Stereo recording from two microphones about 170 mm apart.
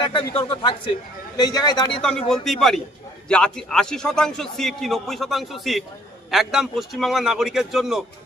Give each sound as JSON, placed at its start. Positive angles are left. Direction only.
{"t": 0.4, "sound": "a man's voice", "side_deg": 30}
{"t": 2.0, "sound": "a man's voice", "side_deg": 5}